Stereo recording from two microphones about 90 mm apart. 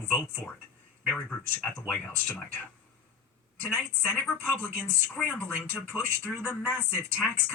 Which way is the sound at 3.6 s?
20° left (ahead or behind).